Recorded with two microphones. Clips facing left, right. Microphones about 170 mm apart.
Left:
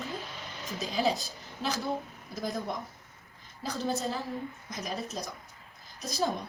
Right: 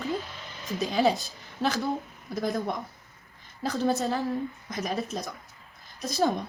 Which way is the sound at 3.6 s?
60° right (ahead or behind).